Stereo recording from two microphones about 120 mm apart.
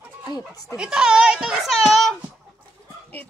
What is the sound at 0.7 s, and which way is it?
A child's voice, 10° right (ahead or behind).